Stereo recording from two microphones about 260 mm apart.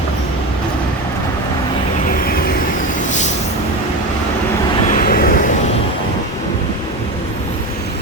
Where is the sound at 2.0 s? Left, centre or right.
Left.